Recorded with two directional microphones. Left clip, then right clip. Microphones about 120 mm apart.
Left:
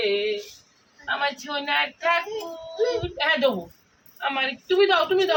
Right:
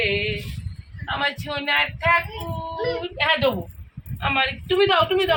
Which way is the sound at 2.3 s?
35° left (ahead or behind).